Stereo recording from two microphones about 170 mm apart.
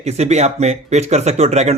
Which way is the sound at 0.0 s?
40° right (ahead or behind).